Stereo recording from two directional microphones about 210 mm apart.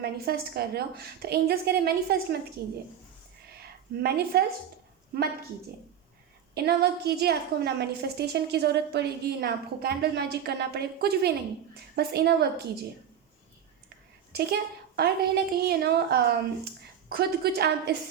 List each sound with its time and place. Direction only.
0.0 s a woman's voice: 50° right (ahead or behind)
6.5 s a woman's voice: 50° right (ahead or behind)
14.3 s a woman's voice: 50° right (ahead or behind)